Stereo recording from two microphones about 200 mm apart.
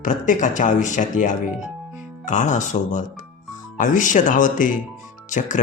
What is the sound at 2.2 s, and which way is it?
Speech, 40° left (ahead or behind).